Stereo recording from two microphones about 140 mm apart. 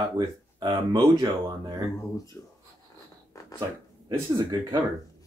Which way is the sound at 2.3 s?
15° left (ahead or behind).